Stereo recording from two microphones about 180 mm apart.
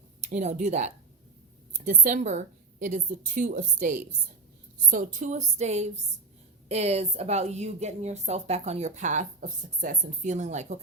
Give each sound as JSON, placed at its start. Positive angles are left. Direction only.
{"t": 0.2, "sound": "a woman's voice", "side_deg": -40}